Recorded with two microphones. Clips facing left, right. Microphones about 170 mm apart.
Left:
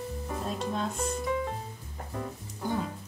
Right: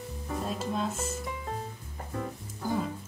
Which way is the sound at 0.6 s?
5° right (ahead or behind).